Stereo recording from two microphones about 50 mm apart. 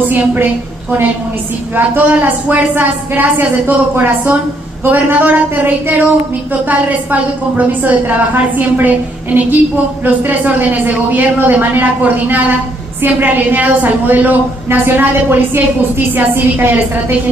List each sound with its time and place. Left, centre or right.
0.1 s a woman's voice: right
2.0 s a woman's voice: right